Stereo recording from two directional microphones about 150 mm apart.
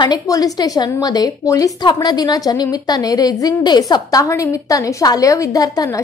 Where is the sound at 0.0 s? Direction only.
25° left (ahead or behind).